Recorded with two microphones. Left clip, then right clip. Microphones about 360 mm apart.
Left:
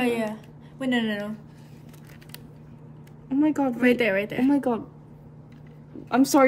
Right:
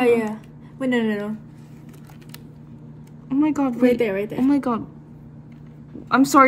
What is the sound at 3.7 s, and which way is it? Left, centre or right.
Speech, centre.